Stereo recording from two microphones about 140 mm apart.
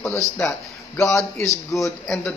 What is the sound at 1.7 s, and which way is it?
Speech, 25° left (ahead or behind).